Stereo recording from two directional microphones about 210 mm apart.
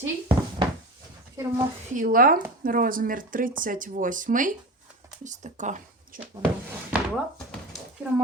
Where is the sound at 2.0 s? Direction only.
45° right (ahead or behind).